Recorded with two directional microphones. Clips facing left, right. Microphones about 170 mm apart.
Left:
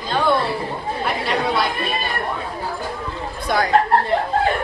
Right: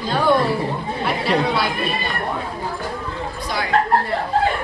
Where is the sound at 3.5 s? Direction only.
50° left (ahead or behind).